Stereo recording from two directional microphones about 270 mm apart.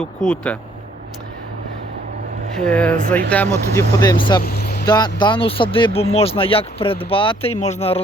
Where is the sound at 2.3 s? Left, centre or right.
Right.